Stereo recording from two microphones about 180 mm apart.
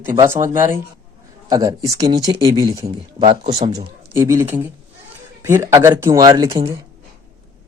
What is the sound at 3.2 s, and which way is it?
Speech, 35° right (ahead or behind).